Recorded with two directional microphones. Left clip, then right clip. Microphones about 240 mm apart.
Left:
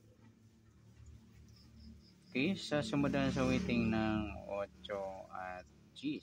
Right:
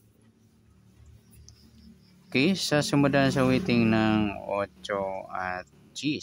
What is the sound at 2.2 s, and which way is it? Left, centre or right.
Speech, right.